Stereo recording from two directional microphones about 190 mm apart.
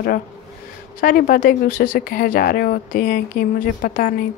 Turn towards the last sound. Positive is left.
turn(degrees=50)  # may be behind; listen again after turning